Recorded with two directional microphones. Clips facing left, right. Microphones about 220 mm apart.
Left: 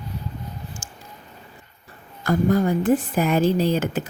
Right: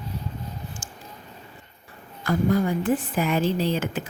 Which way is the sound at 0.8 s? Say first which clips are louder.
Right 1 dB; 45° left (ahead or behind).